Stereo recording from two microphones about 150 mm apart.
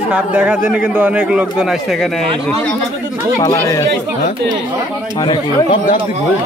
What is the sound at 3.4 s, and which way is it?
Speech, 20° left (ahead or behind).